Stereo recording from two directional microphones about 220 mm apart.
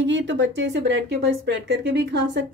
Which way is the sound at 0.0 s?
55° right (ahead or behind).